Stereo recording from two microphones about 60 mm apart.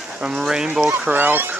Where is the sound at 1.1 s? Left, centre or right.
Right.